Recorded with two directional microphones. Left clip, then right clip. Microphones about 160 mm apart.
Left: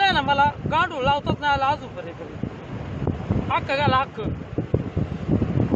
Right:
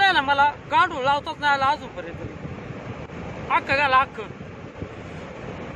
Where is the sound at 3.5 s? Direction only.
35° left (ahead or behind).